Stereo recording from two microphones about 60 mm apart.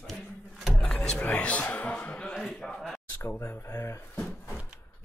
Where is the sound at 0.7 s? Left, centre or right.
Centre.